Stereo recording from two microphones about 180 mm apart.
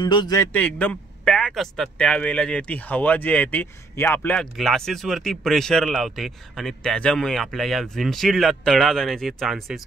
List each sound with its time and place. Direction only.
0.0 s a man's voice: 25° left (ahead or behind); by 9.8 s centre (ahead or behind)